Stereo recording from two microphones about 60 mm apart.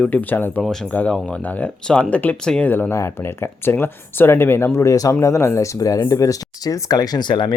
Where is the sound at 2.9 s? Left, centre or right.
Left.